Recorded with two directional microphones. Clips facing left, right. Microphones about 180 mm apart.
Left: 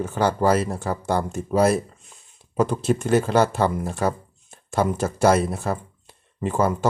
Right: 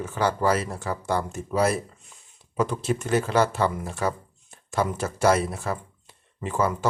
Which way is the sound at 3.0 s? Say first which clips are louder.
Left 3 dB; 25° left (ahead or behind).